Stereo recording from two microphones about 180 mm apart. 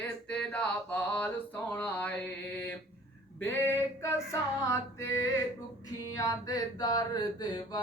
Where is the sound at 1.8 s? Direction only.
10° left (ahead or behind).